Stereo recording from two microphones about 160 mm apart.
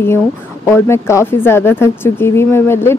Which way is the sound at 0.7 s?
15° left (ahead or behind).